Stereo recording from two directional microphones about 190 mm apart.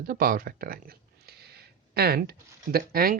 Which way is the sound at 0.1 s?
50° right (ahead or behind).